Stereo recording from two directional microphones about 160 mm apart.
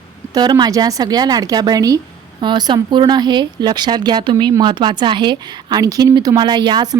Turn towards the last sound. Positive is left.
turn(degrees=-25)  # may be behind; listen again after turning